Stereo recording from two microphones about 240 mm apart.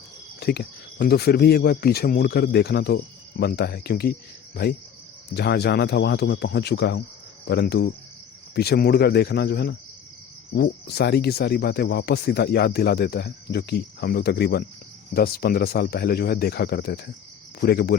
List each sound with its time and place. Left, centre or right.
0.3 s speech: left